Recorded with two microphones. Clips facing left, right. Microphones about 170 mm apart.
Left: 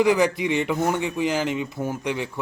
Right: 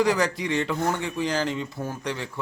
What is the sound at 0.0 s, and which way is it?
A man's voice, 15° left (ahead or behind).